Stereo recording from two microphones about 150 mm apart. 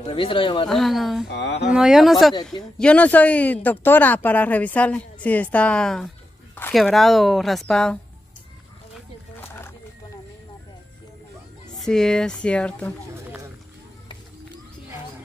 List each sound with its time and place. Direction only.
0.0 s speech: 35° left (ahead or behind)
0.7 s speech: centre (ahead or behind)
9.4 s wild animals: 15° left (ahead or behind)
11.7 s speech: centre (ahead or behind)